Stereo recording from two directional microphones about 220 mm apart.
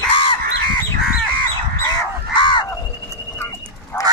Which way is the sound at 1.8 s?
20° left (ahead or behind).